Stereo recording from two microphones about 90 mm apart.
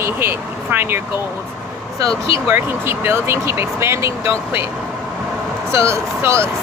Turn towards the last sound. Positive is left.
turn(degrees=-30)  # may be behind; listen again after turning